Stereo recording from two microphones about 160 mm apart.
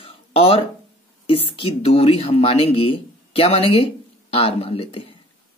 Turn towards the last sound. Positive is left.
turn(degrees=35)  # may be behind; listen again after turning